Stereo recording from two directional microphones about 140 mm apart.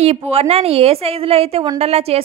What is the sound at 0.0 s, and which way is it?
A woman's voice, 45° right (ahead or behind).